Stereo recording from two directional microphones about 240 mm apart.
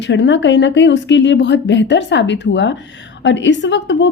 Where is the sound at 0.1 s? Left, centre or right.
Left.